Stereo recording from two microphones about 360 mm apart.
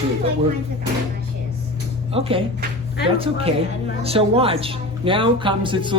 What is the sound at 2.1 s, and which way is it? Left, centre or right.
Speech, centre.